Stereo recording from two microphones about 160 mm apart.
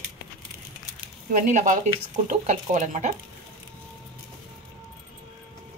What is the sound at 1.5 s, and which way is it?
Speech, 50° right (ahead or behind).